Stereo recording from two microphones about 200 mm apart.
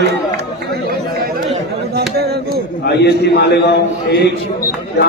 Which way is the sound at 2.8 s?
55° left (ahead or behind).